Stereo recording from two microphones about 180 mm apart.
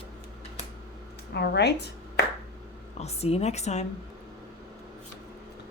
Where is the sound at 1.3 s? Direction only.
65° left (ahead or behind).